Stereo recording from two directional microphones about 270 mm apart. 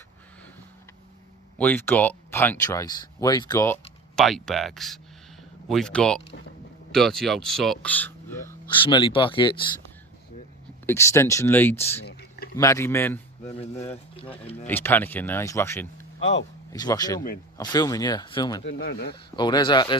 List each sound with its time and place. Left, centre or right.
1.5 s speech: centre
10.8 s speech: centre
12.0 s a sound: left
12.5 s a man's voice: centre
13.5 s speech: left
14.7 s speech: centre
17.2 s speech: left
17.6 s speech: centre
18.6 s speech: left
19.1 s speech: centre